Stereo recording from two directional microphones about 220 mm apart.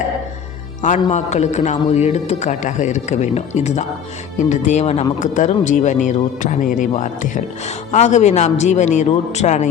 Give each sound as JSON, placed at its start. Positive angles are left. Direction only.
{"t": 1.0, "sound": "speech", "side_deg": 30}